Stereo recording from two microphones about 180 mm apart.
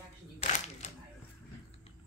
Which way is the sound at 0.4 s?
40° left (ahead or behind).